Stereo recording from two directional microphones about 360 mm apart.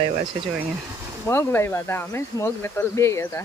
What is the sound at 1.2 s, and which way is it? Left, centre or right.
Speech, centre.